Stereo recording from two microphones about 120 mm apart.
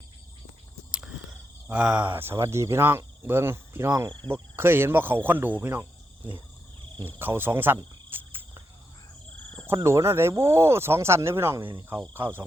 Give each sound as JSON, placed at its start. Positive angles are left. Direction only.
{"t": 0.9, "sound": "a sound", "side_deg": -5}
{"t": 1.6, "sound": "speech", "side_deg": -10}
{"t": 7.2, "sound": "speech", "side_deg": -15}
{"t": 8.1, "sound": "cricket", "side_deg": -20}
{"t": 9.6, "sound": "speech", "side_deg": -25}